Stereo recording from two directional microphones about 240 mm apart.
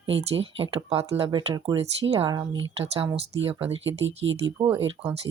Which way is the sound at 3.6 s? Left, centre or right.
Right.